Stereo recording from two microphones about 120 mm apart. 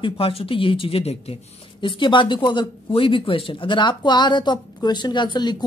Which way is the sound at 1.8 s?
40° left (ahead or behind).